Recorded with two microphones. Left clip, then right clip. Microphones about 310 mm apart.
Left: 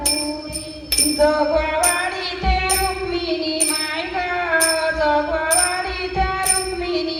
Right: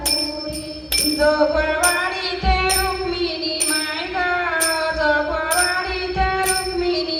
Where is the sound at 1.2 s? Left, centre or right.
Left.